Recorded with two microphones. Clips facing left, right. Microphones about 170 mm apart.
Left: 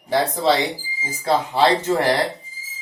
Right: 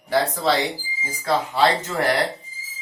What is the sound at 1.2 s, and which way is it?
Speech, 25° left (ahead or behind).